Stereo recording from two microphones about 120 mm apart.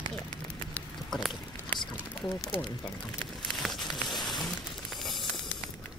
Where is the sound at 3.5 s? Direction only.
Centre (ahead or behind).